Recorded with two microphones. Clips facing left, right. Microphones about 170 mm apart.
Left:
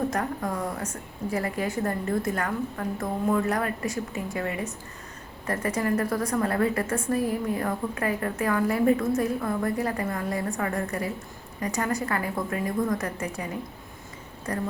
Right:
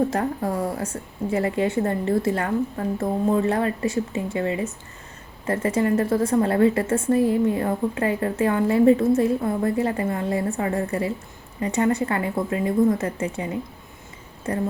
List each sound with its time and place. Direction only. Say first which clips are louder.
0.1 s a woman's voice: right 4 dB; 30° right (ahead or behind)